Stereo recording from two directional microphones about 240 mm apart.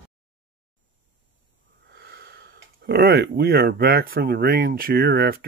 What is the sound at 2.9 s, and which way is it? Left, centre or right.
Speech, right.